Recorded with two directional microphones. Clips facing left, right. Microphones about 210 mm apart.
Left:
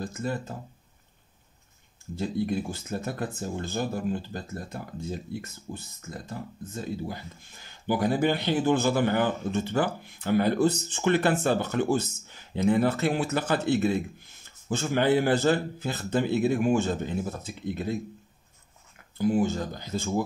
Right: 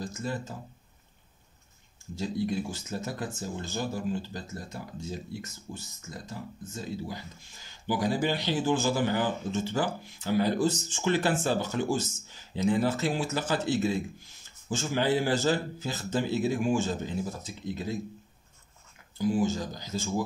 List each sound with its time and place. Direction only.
0.0 s speech: 60° left (ahead or behind)
2.1 s speech: 55° left (ahead or behind)
19.1 s speech: 60° left (ahead or behind)